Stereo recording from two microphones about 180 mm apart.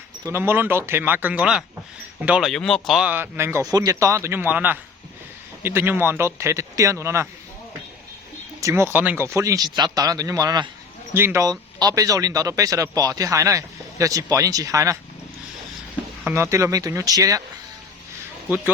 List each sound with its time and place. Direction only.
0.3 s a man's voice: 15° right (ahead or behind)
3.1 s a man's voice: 15° right (ahead or behind)
8.6 s a man's voice: 15° right (ahead or behind)
16.2 s a man's voice: 15° right (ahead or behind)